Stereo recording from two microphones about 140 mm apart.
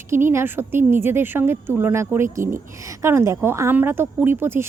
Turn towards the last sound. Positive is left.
turn(degrees=-15)  # may be behind; listen again after turning